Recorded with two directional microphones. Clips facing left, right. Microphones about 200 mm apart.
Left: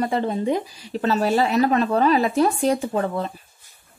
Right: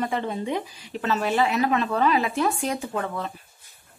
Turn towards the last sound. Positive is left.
turn(degrees=35)  # may be behind; listen again after turning